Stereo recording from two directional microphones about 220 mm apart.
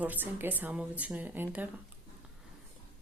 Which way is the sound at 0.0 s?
10° right (ahead or behind).